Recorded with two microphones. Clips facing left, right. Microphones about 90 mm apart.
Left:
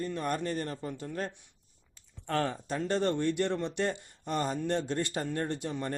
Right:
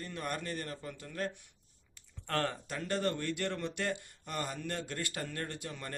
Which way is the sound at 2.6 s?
30° left (ahead or behind).